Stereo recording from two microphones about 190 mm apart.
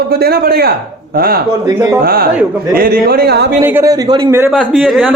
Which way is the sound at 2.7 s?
50° right (ahead or behind).